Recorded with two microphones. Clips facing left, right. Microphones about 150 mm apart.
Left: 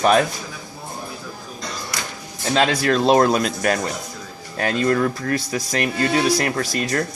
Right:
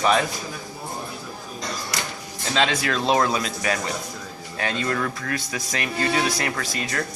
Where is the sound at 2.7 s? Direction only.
40° left (ahead or behind).